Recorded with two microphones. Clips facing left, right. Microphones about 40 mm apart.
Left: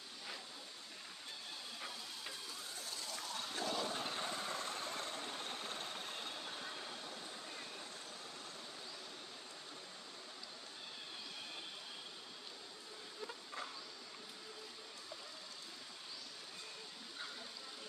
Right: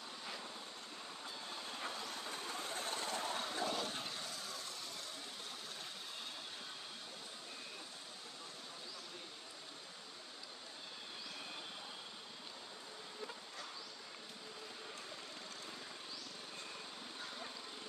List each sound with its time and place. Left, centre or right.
1.9 s vehicle: right
3.4 s a sound: right
3.7 s vehicle: centre
4.0 s vehicle: left